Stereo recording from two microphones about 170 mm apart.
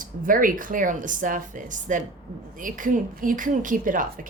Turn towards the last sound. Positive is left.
turn(degrees=-50)  # may be behind; listen again after turning